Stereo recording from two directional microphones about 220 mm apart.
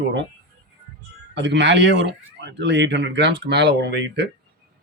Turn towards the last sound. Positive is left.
turn(degrees=-50)  # may be behind; listen again after turning